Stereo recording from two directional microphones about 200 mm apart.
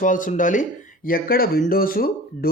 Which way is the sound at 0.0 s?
40° left (ahead or behind).